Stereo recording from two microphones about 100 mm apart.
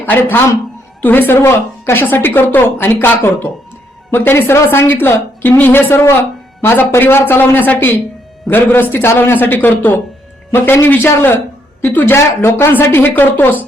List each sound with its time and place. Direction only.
0.0 s a man's voice: 20° left (ahead or behind)